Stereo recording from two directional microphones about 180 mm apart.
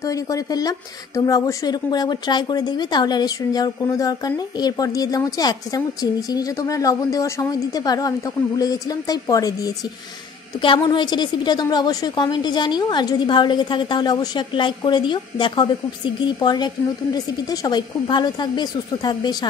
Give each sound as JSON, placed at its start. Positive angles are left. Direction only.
{"t": 0.0, "sound": "speech", "side_deg": 20}
{"t": 10.6, "sound": "speech", "side_deg": 25}